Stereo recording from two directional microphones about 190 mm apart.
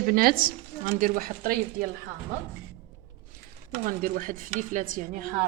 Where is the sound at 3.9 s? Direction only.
45° right (ahead or behind).